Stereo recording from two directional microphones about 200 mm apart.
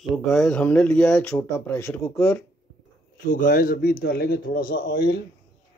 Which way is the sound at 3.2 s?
45° left (ahead or behind).